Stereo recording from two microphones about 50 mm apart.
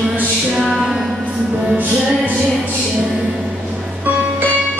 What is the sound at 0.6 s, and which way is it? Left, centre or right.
Music, centre.